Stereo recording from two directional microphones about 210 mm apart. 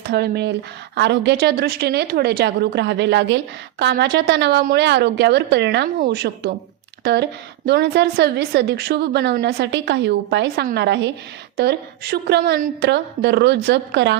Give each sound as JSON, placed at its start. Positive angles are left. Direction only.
{"t": 0.1, "sound": "speech", "side_deg": -50}